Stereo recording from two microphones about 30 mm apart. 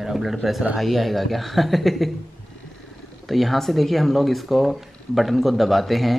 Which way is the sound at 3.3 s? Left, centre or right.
Centre.